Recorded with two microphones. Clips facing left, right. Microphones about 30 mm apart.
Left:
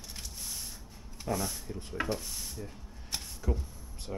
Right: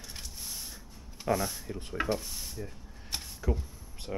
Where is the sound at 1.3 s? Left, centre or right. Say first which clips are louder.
Even; centre.